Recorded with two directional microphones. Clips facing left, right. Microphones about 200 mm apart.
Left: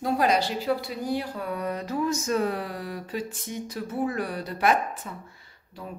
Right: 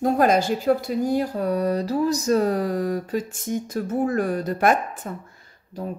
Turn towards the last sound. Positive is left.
turn(degrees=-45)  # may be behind; listen again after turning